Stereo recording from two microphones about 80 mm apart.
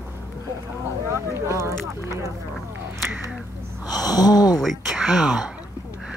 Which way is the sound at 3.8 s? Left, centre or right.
Left.